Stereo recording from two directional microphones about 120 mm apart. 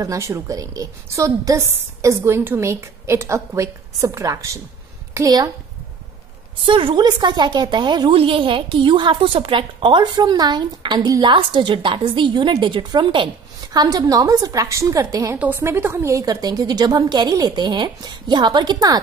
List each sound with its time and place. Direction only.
0.0 s a woman's voice: 25° right (ahead or behind)
6.6 s a woman's voice: 45° right (ahead or behind)
15.3 s a woman's voice: 15° right (ahead or behind); by 18.9 s 35° right (ahead or behind)